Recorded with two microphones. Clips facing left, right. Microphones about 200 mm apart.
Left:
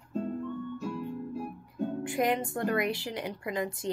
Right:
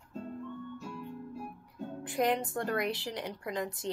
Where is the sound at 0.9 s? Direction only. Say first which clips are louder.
Left 7 dB; 75° left (ahead or behind).